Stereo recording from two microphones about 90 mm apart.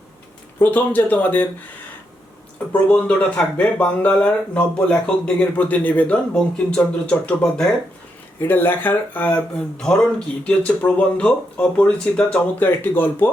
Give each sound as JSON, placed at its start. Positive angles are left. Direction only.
{"t": 0.6, "sound": "speech", "side_deg": 20}
{"t": 2.9, "sound": "speech", "side_deg": 15}
{"t": 8.4, "sound": "speech", "side_deg": 20}